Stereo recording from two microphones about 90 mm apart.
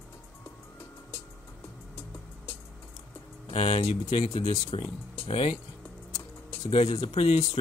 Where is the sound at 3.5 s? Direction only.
90° left.